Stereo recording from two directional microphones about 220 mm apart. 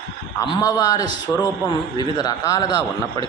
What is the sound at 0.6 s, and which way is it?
Speech, 15° left (ahead or behind).